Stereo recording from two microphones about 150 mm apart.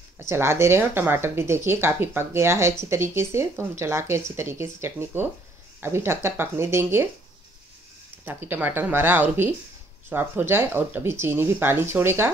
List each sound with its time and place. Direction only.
0.2 s speech: 15° right (ahead or behind)
8.3 s speech: 15° right (ahead or behind)